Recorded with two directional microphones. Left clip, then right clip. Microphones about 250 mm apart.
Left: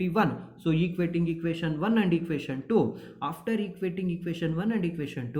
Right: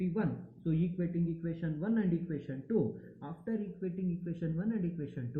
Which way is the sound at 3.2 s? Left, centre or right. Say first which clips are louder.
Left 11 dB; centre.